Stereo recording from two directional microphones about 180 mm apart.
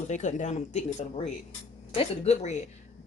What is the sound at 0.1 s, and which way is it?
Speech, 40° left (ahead or behind).